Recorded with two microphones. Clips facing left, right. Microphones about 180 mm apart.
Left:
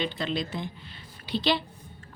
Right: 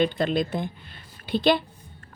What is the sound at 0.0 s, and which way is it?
Speech, 50° right (ahead or behind).